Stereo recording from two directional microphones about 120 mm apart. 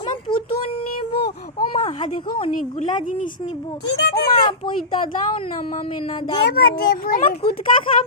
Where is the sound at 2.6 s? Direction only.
90° left.